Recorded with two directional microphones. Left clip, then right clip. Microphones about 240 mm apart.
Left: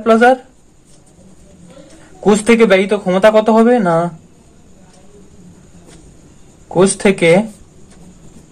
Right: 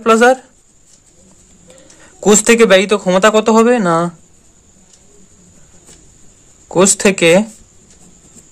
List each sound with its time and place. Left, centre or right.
0.0 s speech: right
2.2 s speech: right
6.7 s speech: right